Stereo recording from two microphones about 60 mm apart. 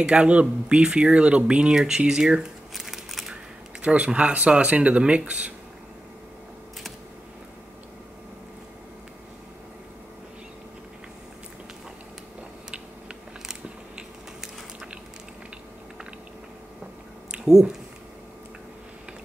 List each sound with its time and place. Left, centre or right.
0.0 s speech: centre
2.7 s crumpling: centre
3.8 s speech: right
12.7 s biting: centre